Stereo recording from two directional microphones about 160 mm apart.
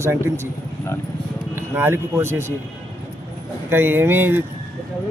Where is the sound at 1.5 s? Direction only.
15° right (ahead or behind).